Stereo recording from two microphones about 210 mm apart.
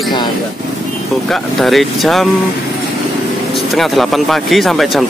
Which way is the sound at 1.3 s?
Centre (ahead or behind).